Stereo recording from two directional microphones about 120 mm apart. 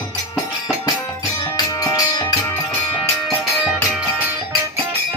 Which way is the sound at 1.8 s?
30° left (ahead or behind).